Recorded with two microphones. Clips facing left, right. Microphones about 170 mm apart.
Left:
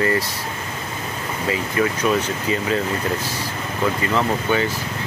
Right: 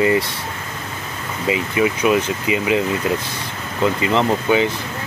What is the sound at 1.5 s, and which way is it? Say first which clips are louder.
Speech: right 3 dB; 10° right (ahead or behind).